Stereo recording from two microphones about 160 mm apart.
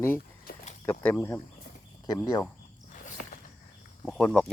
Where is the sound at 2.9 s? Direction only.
55° left (ahead or behind).